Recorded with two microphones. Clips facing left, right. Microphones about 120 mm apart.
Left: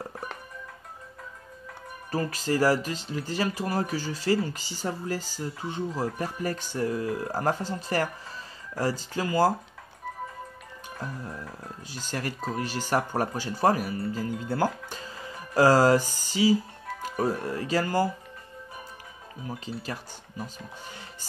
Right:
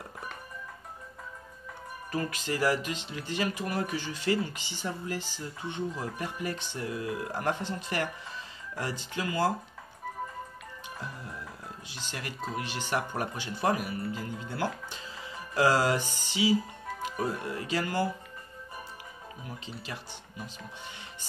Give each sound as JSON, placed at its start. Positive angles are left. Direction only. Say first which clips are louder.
{"t": 2.0, "sound": "speech", "louder": "left 4 dB", "side_deg": 35}
{"t": 11.9, "sound": "speech", "louder": "left 8 dB", "side_deg": 40}
{"t": 19.4, "sound": "speech", "louder": "left 8 dB", "side_deg": 40}